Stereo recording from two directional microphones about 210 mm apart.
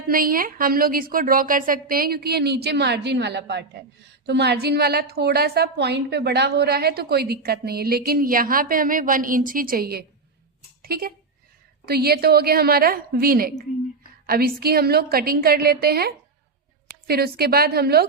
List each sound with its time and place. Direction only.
0.1 s a woman's voice: 45° right (ahead or behind)